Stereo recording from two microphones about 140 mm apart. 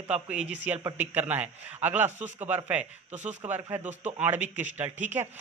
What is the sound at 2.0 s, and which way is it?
Speech, 55° right (ahead or behind).